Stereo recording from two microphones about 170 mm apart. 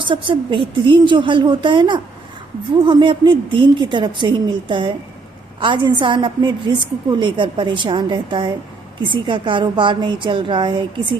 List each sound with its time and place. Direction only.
0.0 s a woman's voice: 30° right (ahead or behind)